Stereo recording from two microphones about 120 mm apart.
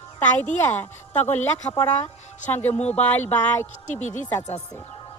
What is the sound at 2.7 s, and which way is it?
Speech, 60° left (ahead or behind).